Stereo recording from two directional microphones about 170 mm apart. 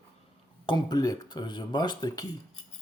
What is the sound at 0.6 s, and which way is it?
Speech, 25° left (ahead or behind).